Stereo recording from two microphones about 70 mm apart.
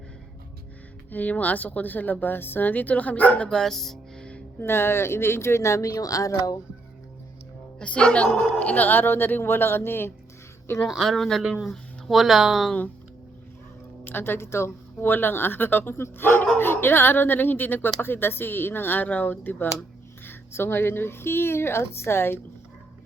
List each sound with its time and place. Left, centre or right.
1.1 s a woman's voice: left; by 4.3 s centre
4.6 s speech: left
7.8 s a woman's voice: centre; by 10.1 s left
10.9 s speech: centre
14.0 s a woman's voice: left